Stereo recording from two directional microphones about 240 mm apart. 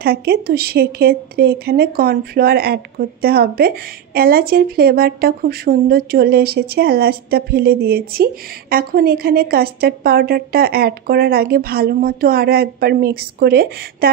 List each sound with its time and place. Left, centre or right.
0.0 s a woman's voice: right